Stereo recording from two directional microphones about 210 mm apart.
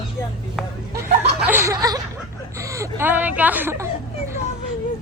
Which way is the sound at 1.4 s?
10° right (ahead or behind).